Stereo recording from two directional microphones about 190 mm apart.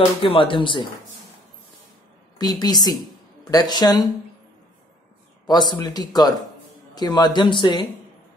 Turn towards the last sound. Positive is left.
turn(degrees=25)  # may be behind; listen again after turning